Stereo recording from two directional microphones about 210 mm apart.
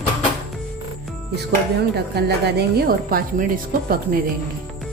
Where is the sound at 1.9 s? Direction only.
50° right (ahead or behind).